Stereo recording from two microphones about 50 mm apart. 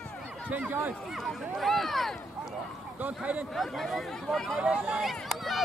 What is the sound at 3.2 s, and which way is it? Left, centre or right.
Speech, right.